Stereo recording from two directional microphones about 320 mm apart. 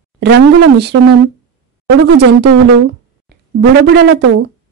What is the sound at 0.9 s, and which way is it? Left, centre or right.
Speech, right.